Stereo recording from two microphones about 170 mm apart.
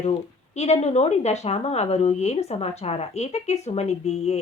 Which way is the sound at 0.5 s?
40° left (ahead or behind).